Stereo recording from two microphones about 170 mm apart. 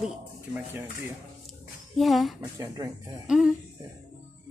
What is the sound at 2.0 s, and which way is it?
Speech, centre (ahead or behind).